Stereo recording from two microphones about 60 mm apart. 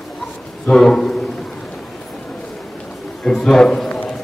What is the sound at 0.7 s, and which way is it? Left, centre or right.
Speech, centre.